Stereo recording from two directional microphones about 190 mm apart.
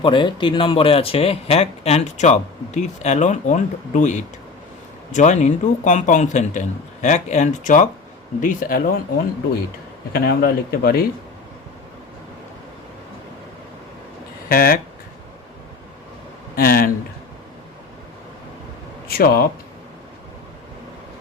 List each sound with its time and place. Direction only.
0.0 s speech: 25° left (ahead or behind); by 9.0 s 50° left (ahead or behind)
10.2 s speech: 55° left (ahead or behind)
14.5 s speech: 50° left (ahead or behind)
16.6 s speech: 50° left (ahead or behind)
19.0 s speech: 55° left (ahead or behind)